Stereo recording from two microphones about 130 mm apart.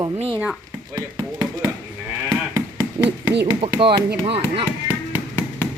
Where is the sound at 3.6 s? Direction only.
45° right (ahead or behind).